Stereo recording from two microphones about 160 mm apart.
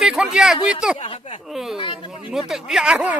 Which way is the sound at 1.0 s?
40° left (ahead or behind).